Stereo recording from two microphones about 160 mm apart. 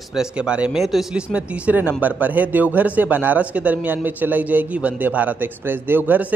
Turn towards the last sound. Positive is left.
turn(degrees=-10)  # may be behind; listen again after turning